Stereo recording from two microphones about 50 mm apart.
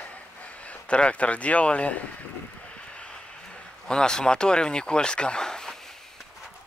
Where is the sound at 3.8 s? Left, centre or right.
Centre.